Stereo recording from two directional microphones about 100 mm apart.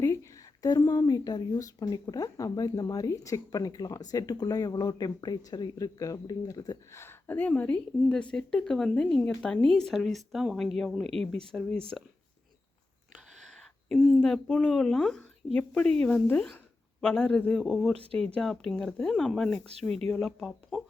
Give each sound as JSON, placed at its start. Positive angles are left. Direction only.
{"t": 0.0, "sound": "a sound", "side_deg": 35}
{"t": 0.9, "sound": "speech", "side_deg": 40}
{"t": 6.9, "sound": "a woman's voice", "side_deg": 25}
{"t": 13.1, "sound": "a sound", "side_deg": 0}
{"t": 14.7, "sound": "a woman's voice", "side_deg": 5}
{"t": 17.0, "sound": "a man's voice", "side_deg": 5}
{"t": 17.9, "sound": "speech", "side_deg": -75}
{"t": 18.3, "sound": "speech", "side_deg": 5}